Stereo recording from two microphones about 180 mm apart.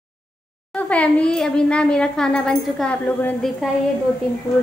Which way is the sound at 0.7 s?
5° left (ahead or behind).